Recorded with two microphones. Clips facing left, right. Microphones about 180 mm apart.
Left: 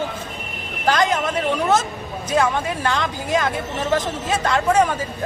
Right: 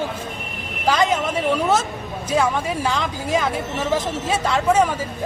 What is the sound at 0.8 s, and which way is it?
Speech, 10° right (ahead or behind).